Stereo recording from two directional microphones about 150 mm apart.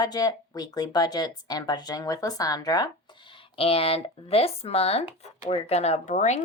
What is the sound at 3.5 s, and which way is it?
Speech, 40° left (ahead or behind).